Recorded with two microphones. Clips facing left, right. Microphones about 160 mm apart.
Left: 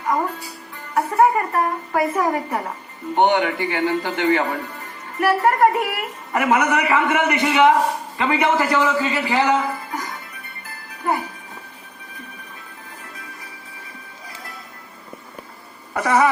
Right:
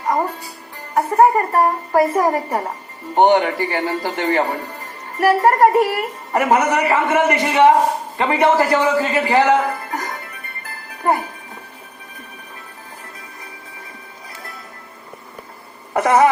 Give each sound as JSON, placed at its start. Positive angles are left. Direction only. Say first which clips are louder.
{"t": 0.0, "sound": "music", "louder": "right 2 dB", "side_deg": -40}
{"t": 0.9, "sound": "a man's voice", "louder": "right 3 dB", "side_deg": -40}